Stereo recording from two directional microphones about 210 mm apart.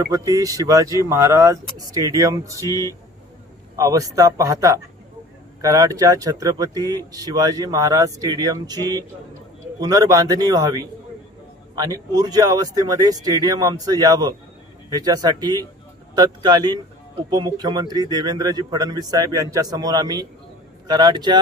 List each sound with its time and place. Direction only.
0.1 s speech: 15° right (ahead or behind)
2.6 s speech: 15° left (ahead or behind)
3.7 s speech: 15° right (ahead or behind)